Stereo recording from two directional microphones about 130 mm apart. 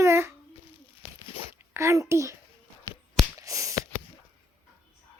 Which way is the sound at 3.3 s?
25° right (ahead or behind).